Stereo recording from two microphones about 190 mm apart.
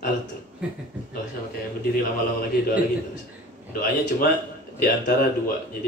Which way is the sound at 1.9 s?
50° left (ahead or behind).